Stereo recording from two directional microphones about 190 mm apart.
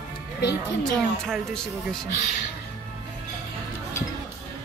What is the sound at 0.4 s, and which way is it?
Speech, 60° left (ahead or behind).